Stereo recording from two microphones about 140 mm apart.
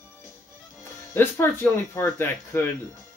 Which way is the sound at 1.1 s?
15° left (ahead or behind).